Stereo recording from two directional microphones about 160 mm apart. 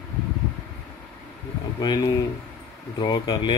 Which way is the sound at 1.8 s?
25° left (ahead or behind).